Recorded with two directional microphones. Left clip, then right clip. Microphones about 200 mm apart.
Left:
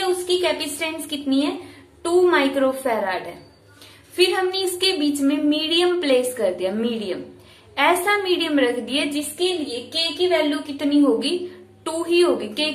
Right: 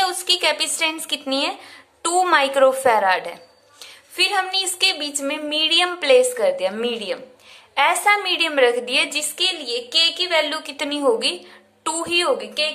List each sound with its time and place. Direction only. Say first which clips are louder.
0.4 s a woman's voice: right 3 dB; 40° right (ahead or behind)
4.2 s a woman's voice: even; 35° right (ahead or behind)